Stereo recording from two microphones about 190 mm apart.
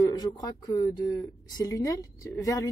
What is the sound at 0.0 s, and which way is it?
A woman's voice, 20° left (ahead or behind).